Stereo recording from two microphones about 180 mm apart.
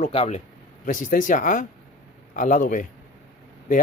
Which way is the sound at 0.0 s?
40° left (ahead or behind).